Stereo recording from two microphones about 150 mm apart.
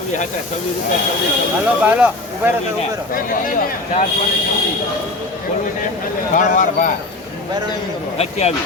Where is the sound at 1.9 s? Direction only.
10° right (ahead or behind).